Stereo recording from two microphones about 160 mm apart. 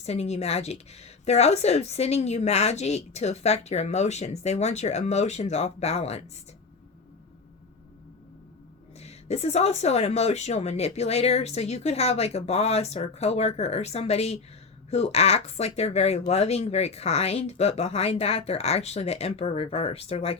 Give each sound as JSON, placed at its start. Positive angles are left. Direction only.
{"t": 0.0, "sound": "a woman's voice", "side_deg": 40}
{"t": 9.0, "sound": "speech", "side_deg": 40}